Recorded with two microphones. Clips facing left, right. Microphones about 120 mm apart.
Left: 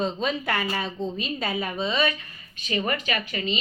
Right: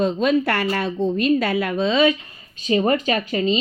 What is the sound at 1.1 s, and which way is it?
Speech, 60° right (ahead or behind).